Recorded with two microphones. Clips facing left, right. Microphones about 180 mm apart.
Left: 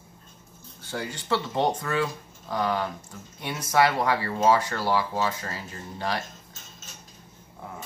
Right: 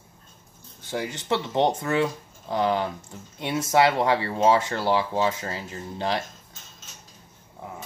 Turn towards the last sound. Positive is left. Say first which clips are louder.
# right 3 dB
turn(degrees=-25)  # may be behind; listen again after turning